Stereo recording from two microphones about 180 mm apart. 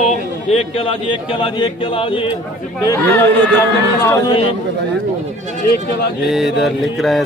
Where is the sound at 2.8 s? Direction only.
15° left (ahead or behind).